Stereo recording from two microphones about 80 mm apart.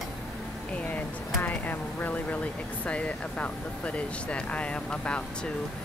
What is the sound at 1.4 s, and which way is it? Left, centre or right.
Speech, left.